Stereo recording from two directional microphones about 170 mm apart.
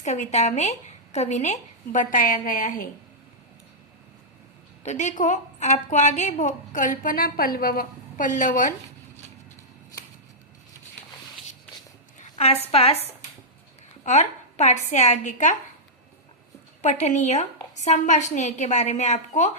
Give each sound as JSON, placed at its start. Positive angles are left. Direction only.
{"t": 0.0, "sound": "a woman's voice", "side_deg": 45}
{"t": 4.8, "sound": "a woman's voice", "side_deg": 45}
{"t": 12.7, "sound": "a woman's voice", "side_deg": 35}
{"t": 14.0, "sound": "a woman's voice", "side_deg": 45}
{"t": 16.8, "sound": "a woman's voice", "side_deg": 45}